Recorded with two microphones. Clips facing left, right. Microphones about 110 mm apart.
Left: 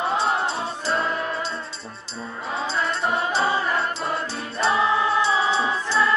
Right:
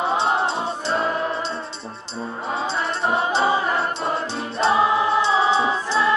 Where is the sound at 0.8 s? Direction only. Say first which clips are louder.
Right 2 dB; 25° right (ahead or behind).